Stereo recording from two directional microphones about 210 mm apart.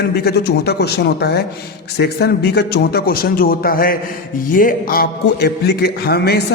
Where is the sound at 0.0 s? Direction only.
50° left (ahead or behind).